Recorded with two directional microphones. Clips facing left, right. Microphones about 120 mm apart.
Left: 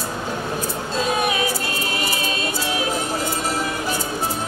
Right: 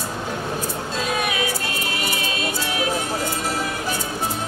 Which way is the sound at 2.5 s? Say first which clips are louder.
Even; 30° left (ahead or behind).